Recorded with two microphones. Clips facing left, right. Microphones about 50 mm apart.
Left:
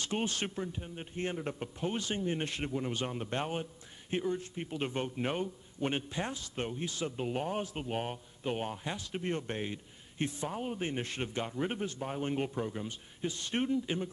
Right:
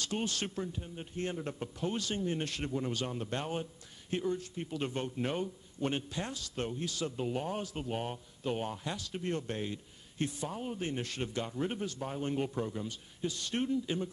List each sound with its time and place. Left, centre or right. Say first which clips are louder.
0.0 s a man's voice: left 1 dB; left
12.8 s a man's voice: even; left